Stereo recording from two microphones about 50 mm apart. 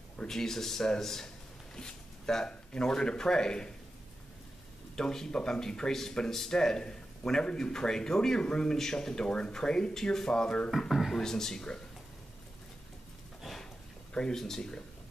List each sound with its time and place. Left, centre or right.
0.3 s speech: centre
4.9 s speech: centre
10.9 s speech: centre
11.1 s speech: centre
13.4 s a sound: centre
14.1 s speech: centre